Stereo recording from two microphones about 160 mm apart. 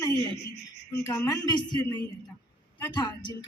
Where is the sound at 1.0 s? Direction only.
20° left (ahead or behind).